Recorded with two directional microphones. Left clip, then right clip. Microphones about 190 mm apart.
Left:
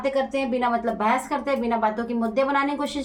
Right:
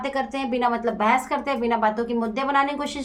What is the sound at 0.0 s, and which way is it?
A woman's voice, 30° right (ahead or behind).